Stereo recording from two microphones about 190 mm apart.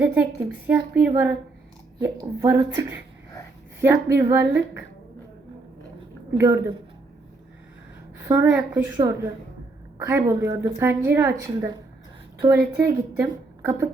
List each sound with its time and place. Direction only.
0.0 s a woman's voice: 10° right (ahead or behind)
3.8 s a woman's voice: 15° right (ahead or behind)
6.3 s a woman's voice: 15° right (ahead or behind)
8.2 s a woman's voice: 10° right (ahead or behind)